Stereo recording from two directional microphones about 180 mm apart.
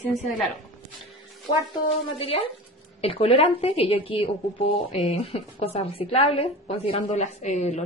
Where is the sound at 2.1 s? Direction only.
30° left (ahead or behind).